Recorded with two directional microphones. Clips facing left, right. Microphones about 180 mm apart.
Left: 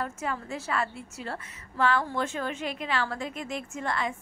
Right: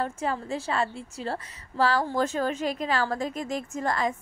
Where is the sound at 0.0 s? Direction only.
30° right (ahead or behind).